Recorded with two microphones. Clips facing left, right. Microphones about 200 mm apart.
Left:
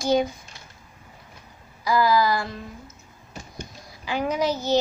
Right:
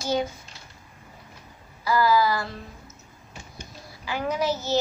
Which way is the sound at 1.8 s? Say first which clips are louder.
Left 1 dB; 15° left (ahead or behind).